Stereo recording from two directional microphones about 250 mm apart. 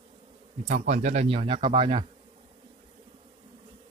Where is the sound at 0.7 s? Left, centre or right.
Right.